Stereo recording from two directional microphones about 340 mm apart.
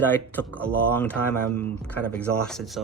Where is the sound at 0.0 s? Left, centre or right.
Centre.